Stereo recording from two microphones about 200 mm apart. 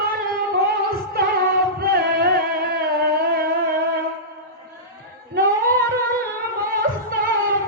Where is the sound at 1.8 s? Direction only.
50° right (ahead or behind).